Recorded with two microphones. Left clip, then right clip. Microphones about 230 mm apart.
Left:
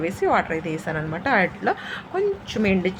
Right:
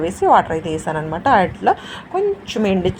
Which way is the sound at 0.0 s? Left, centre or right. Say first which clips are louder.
Right 7 dB; centre.